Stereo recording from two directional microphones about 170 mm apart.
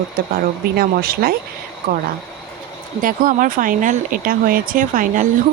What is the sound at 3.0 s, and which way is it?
Speech, 55° right (ahead or behind).